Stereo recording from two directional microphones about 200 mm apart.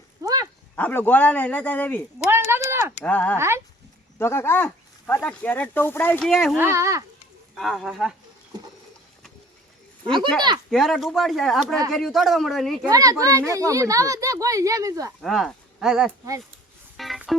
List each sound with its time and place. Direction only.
0.2 s a sound: 20° right (ahead or behind)
0.8 s speech: 10° left (ahead or behind)
2.1 s a sound: 10° right (ahead or behind)
3.0 s speech: 5° left (ahead or behind)
3.3 s speech: 15° right (ahead or behind)
4.2 s speech: 10° left (ahead or behind)
6.6 s speech: 15° right (ahead or behind)
7.5 s speech: centre (ahead or behind)
10.7 s speech: centre (ahead or behind)
12.9 s speech: 15° right (ahead or behind)
15.2 s speech: centre (ahead or behind)
17.0 s a sound: centre (ahead or behind)